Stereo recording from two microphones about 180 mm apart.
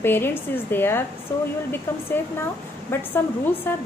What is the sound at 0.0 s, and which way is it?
A woman's voice, 10° left (ahead or behind).